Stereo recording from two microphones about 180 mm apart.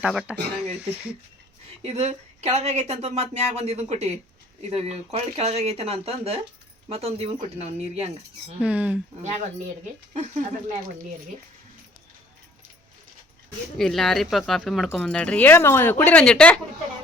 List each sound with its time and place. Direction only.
0.0 s speech: 5° right (ahead or behind)
1.8 s speech: 35° right (ahead or behind)
8.6 s speech: 5° right (ahead or behind)
9.2 s speech: 40° right (ahead or behind)
13.7 s speech: centre (ahead or behind)